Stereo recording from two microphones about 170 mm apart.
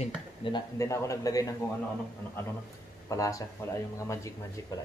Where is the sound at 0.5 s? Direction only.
20° left (ahead or behind).